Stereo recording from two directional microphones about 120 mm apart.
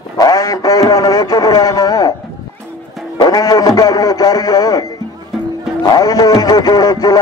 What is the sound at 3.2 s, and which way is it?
Radio, 35° left (ahead or behind).